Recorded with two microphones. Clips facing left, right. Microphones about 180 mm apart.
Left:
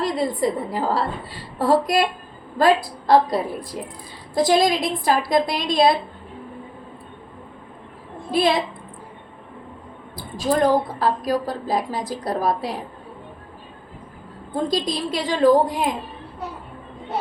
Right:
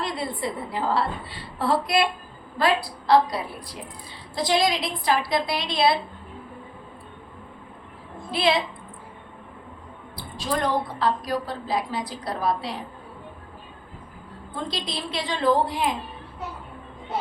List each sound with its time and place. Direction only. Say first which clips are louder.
0.0 s a woman's voice: left 7 dB; 40° left (ahead or behind)
8.3 s a woman's voice: left 3 dB; 45° left (ahead or behind)
10.2 s a sound: left 6 dB; 45° left (ahead or behind)
10.7 s a woman's voice: left 5 dB; 45° left (ahead or behind)
14.5 s a woman's voice: left 8 dB; 45° left (ahead or behind)